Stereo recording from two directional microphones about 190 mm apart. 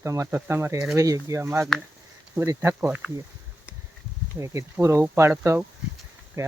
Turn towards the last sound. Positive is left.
turn(degrees=-15)  # may be behind; listen again after turning